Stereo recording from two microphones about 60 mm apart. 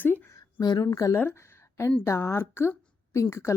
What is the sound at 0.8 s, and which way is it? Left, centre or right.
Speech, left.